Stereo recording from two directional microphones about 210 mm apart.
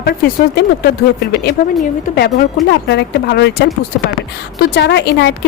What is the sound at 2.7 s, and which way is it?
A woman's voice, 55° left (ahead or behind).